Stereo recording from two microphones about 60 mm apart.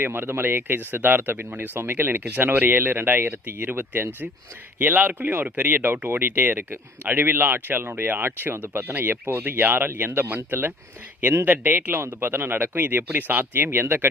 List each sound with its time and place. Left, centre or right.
0.0 s speech: right